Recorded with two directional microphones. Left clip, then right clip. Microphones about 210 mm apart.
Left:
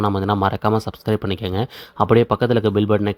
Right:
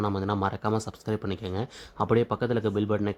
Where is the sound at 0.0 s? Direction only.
25° left (ahead or behind).